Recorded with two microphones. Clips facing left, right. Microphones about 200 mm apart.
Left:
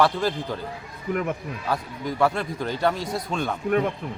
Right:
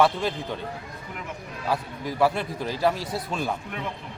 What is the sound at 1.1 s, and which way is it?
Speech, 50° left (ahead or behind).